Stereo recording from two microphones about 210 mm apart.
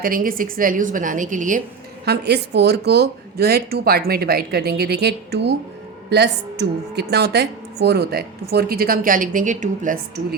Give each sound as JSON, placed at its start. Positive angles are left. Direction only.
{"t": 0.0, "sound": "a woman's voice", "side_deg": -40}
{"t": 2.0, "sound": "a woman's voice", "side_deg": -50}